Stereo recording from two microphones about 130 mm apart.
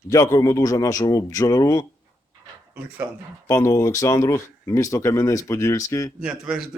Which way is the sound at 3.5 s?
25° left (ahead or behind).